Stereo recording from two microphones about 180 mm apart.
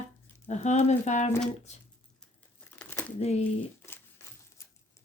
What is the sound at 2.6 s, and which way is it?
Crumpling, 10° left (ahead or behind).